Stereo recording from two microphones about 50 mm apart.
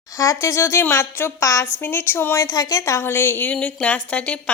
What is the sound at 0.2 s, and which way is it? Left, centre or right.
Speech, left.